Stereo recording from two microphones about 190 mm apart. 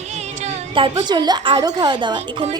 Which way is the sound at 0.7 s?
25° right (ahead or behind).